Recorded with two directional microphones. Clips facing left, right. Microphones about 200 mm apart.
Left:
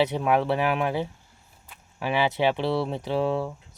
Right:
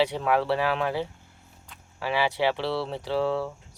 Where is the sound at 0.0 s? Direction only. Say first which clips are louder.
Left 1 dB; 20° left (ahead or behind).